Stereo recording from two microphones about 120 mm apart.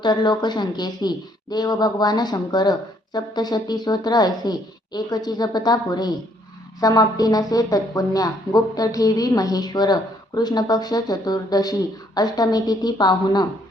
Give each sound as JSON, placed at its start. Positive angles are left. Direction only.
{"t": 0.0, "sound": "speech", "side_deg": 40}